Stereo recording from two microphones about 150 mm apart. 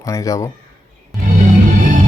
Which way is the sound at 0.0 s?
20° left (ahead or behind).